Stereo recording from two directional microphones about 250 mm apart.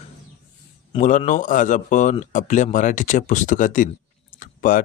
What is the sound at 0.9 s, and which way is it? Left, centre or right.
Speech, left.